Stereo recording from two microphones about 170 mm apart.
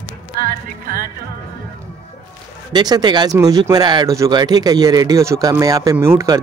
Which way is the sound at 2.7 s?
25° right (ahead or behind).